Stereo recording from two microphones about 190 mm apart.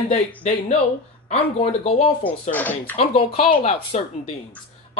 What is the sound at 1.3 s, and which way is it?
Speech, 35° left (ahead or behind).